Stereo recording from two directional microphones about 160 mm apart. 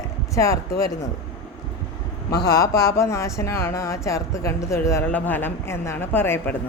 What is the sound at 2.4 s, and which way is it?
Speech, 20° left (ahead or behind).